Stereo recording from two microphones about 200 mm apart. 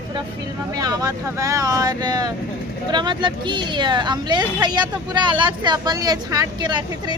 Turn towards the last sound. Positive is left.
turn(degrees=-20)  # may be behind; listen again after turning